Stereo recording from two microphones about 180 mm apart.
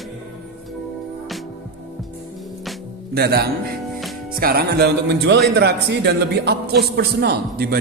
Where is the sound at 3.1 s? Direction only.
65° right (ahead or behind).